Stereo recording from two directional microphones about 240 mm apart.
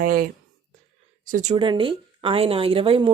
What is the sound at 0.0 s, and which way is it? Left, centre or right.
Speech, right.